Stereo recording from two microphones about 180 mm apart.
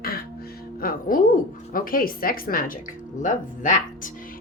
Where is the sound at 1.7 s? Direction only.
50° left (ahead or behind).